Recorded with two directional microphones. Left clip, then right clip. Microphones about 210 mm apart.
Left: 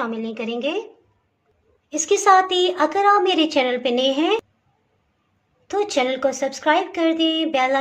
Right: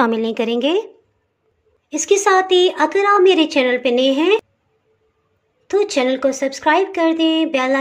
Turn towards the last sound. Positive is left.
turn(degrees=-20)  # may be behind; listen again after turning